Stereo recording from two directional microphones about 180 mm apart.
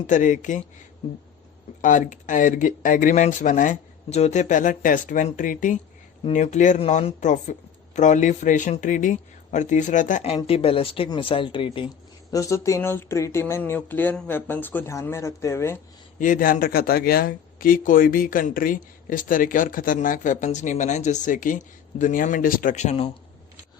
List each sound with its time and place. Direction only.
0.1 s speech: 45° left (ahead or behind)
1.8 s speech: 45° left (ahead or behind); by 11.9 s 30° left (ahead or behind)
12.3 s speech: 15° left (ahead or behind)
16.1 s speech: 45° left (ahead or behind)